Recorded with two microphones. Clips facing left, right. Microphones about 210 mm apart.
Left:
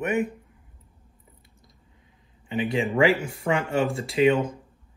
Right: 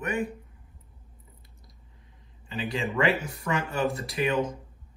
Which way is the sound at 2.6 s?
20° left (ahead or behind).